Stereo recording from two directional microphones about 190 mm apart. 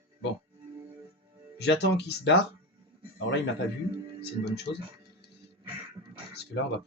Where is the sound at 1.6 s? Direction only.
65° left (ahead or behind).